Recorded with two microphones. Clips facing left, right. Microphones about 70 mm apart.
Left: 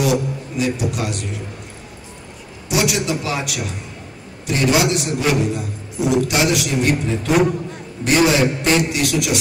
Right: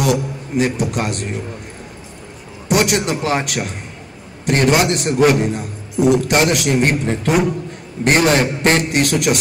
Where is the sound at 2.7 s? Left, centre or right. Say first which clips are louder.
Right 3 dB; right.